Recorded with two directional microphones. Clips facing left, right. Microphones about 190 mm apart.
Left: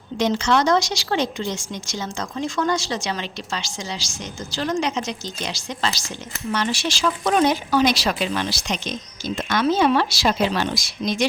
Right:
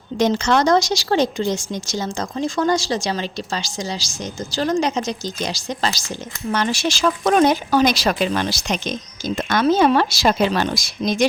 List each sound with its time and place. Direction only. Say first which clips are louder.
0.2 s a woman's voice: right 2 dB; 45° right (ahead or behind)